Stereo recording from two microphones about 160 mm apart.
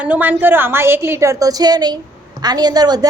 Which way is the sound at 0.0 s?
10° right (ahead or behind).